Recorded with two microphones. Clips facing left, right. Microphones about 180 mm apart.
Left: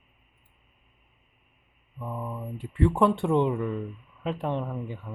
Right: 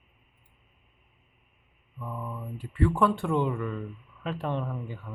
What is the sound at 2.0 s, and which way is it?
Speech, 20° left (ahead or behind).